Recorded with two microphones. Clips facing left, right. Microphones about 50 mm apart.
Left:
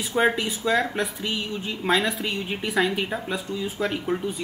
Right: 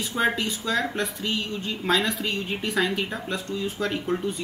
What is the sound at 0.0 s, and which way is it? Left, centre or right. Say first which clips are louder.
Speech: left 2 dB; centre.